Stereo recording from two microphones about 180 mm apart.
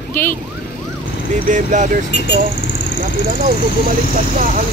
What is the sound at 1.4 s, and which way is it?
Speech, 45° right (ahead or behind).